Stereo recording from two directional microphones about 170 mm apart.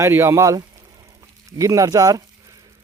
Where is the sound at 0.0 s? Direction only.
15° right (ahead or behind).